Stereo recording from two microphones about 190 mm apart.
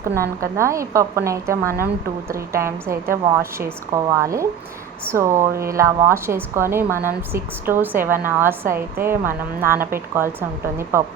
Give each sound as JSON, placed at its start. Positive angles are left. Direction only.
{"t": 0.0, "sound": "a woman's voice", "side_deg": -15}